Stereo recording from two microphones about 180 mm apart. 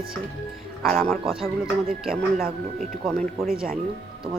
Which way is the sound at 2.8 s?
Centre (ahead or behind).